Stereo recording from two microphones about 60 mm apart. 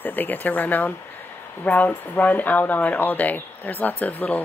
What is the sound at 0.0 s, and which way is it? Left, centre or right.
Speech, left.